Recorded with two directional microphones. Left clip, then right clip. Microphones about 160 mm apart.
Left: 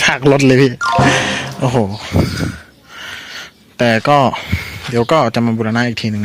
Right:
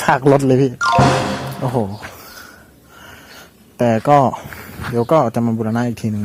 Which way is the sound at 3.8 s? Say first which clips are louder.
Left 2 dB; 5° left (ahead or behind).